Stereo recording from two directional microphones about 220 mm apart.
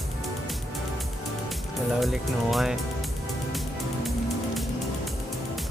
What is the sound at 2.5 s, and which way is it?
Speech, centre (ahead or behind).